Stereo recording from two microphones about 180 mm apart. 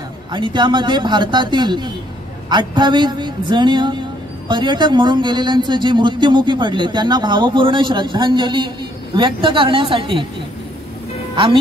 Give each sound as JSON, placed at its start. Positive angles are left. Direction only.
{"t": 0.3, "sound": "speech", "side_deg": -25}